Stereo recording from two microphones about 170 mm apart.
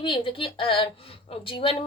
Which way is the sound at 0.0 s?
30° left (ahead or behind).